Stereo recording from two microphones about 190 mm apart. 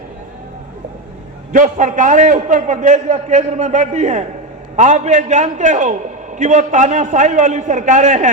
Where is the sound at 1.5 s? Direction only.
40° right (ahead or behind).